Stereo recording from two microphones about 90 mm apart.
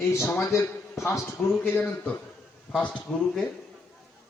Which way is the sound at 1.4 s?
15° left (ahead or behind).